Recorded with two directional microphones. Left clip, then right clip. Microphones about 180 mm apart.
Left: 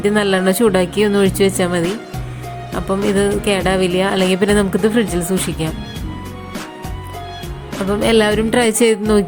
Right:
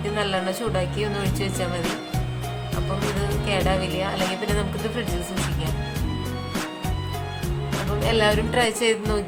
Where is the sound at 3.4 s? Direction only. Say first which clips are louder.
Left 8 dB; 40° left (ahead or behind).